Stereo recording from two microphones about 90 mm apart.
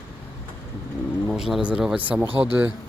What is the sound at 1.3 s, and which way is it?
Speech, 5° right (ahead or behind).